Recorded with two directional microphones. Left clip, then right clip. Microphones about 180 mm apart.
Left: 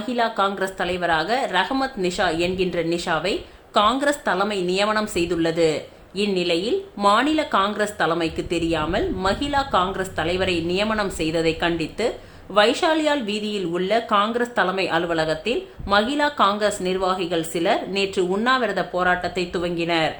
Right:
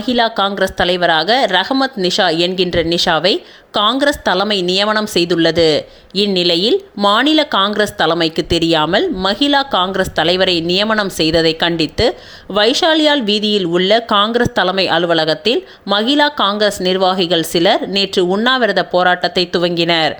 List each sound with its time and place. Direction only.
0.1 s a woman's voice: 35° right (ahead or behind)